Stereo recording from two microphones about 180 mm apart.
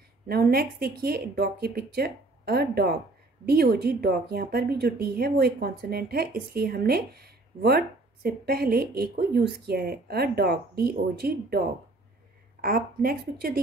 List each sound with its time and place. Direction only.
0.3 s a woman's voice: 60° right (ahead or behind)
12.6 s a woman's voice: 55° right (ahead or behind)